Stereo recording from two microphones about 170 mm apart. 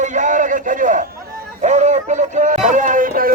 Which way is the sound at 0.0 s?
45° right (ahead or behind).